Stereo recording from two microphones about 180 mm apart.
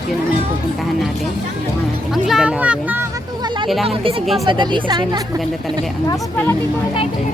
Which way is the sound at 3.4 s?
25° right (ahead or behind).